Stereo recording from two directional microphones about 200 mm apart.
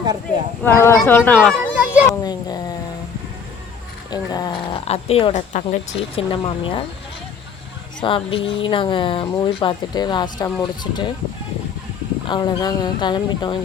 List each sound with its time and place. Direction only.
0.6 s speech: 10° left (ahead or behind)
2.0 s speech: 20° left (ahead or behind)
4.1 s a sound: 20° left (ahead or behind)
4.9 s a woman's voice: 30° left (ahead or behind)
6.1 s speech: 25° left (ahead or behind)
8.0 s speech: 25° left (ahead or behind)
12.3 s speech: 20° left (ahead or behind)